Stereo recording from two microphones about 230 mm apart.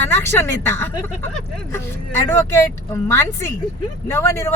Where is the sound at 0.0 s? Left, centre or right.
Centre.